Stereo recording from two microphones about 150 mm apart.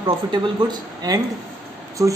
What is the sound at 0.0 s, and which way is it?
Speech, 30° right (ahead or behind).